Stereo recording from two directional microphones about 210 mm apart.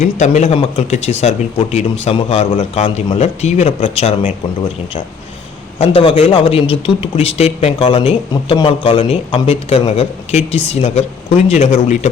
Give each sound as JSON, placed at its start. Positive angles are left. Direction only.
{"t": 0.0, "sound": "speech", "side_deg": 35}
{"t": 5.8, "sound": "a man's voice", "side_deg": 25}